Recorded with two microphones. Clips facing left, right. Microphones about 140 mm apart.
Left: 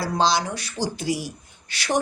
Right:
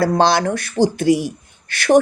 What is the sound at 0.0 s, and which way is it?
A man's voice, 55° right (ahead or behind).